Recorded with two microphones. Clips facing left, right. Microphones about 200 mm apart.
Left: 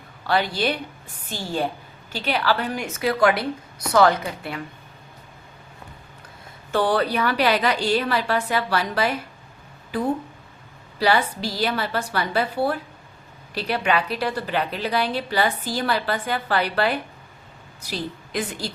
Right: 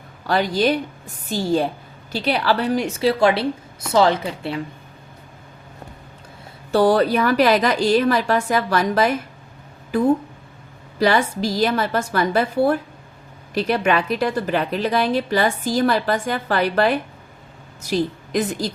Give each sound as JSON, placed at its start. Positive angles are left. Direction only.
{"t": 0.3, "sound": "a woman's voice", "side_deg": -45}
{"t": 6.7, "sound": "a woman's voice", "side_deg": -40}
{"t": 11.0, "sound": "a woman's voice", "side_deg": -45}